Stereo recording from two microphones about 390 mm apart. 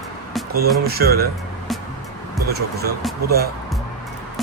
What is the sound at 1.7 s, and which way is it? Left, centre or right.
Music, centre.